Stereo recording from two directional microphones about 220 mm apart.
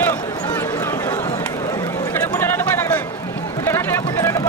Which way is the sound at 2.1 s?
10° left (ahead or behind).